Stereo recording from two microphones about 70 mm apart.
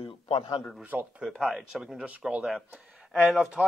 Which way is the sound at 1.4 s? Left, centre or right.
Centre.